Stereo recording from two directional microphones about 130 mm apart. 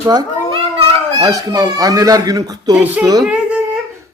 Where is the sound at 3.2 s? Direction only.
10° right (ahead or behind).